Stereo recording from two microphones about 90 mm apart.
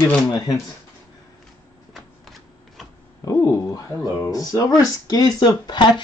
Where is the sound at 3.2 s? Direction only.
35° left (ahead or behind); by 6.0 s 55° left (ahead or behind).